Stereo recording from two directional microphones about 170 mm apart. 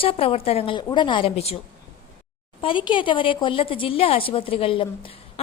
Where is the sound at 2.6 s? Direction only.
30° left (ahead or behind).